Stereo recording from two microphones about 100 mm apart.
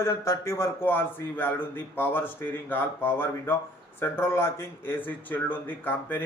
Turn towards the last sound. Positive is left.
turn(degrees=20)  # may be behind; listen again after turning